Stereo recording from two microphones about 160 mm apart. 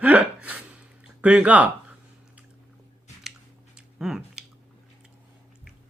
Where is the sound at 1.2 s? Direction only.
10° right (ahead or behind).